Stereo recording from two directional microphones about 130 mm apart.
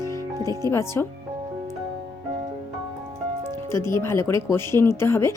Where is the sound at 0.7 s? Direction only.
20° left (ahead or behind).